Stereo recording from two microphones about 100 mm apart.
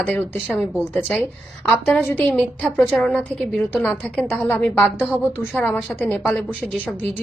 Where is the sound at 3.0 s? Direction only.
5° left (ahead or behind); by 4.9 s 20° left (ahead or behind).